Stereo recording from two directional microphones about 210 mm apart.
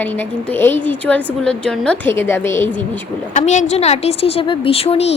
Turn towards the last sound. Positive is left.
turn(degrees=30)  # may be behind; listen again after turning